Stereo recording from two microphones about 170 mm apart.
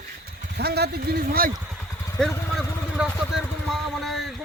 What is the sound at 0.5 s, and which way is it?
Speech, 70° right (ahead or behind).